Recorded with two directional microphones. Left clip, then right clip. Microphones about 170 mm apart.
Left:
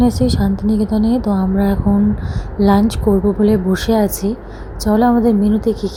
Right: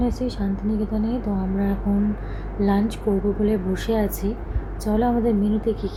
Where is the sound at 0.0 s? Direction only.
50° left (ahead or behind).